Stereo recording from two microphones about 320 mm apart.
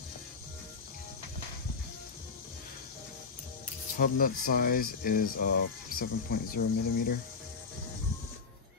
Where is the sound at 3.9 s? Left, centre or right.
Left.